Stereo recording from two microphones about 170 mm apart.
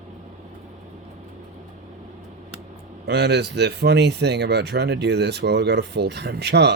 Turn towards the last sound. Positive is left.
turn(degrees=-75)  # may be behind; listen again after turning